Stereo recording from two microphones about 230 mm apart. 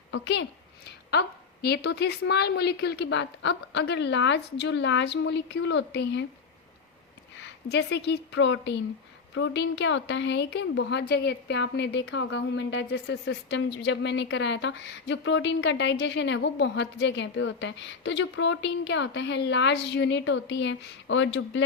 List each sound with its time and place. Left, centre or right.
0.1 s a woman's voice: left
1.6 s a woman's voice: left
7.4 s a woman's voice: left